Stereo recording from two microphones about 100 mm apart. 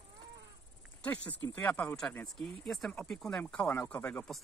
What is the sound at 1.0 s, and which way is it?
Speech, 15° left (ahead or behind).